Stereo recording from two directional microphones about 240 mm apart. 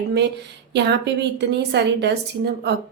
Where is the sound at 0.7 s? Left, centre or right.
Right.